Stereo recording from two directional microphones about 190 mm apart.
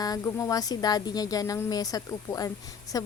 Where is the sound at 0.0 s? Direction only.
20° left (ahead or behind).